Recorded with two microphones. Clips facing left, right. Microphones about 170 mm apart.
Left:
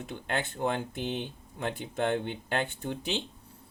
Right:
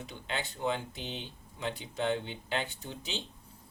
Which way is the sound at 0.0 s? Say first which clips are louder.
Left 5 dB; 55° left (ahead or behind).